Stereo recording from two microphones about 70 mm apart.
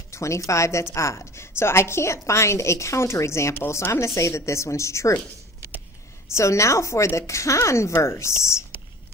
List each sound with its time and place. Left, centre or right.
0.1 s a woman's voice: left
6.3 s a woman's voice: left